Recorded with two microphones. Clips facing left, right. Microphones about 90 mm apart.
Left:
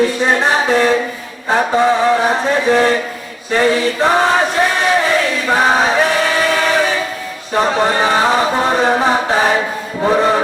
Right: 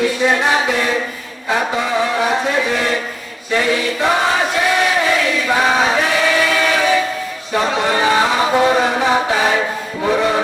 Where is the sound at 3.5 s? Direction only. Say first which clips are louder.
Left 3 dB; 35° left (ahead or behind).